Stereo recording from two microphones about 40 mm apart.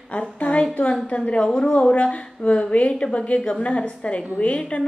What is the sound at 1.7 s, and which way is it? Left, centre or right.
A woman's voice, left.